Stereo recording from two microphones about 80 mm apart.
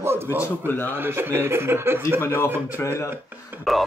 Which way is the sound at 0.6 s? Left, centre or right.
Left.